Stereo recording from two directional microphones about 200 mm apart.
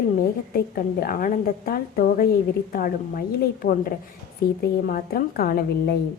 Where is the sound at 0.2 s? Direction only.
50° left (ahead or behind).